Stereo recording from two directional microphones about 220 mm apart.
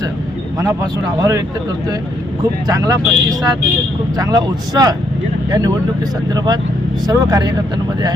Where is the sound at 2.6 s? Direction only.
15° right (ahead or behind).